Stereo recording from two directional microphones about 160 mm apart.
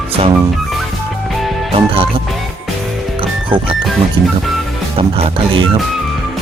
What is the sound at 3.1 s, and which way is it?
Music, 35° right (ahead or behind).